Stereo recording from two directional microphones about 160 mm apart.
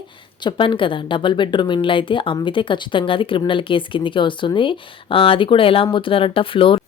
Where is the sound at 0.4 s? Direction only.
30° left (ahead or behind).